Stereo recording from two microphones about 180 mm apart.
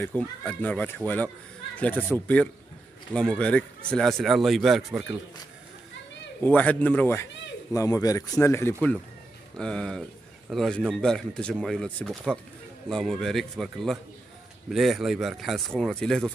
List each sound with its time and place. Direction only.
0.0 s speech: 5° left (ahead or behind)
6.4 s speech: 10° left (ahead or behind)